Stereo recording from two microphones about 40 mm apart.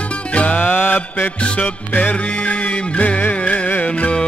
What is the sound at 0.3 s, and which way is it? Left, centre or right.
Music, left.